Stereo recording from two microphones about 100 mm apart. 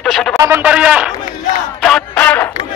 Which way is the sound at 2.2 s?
15° left (ahead or behind).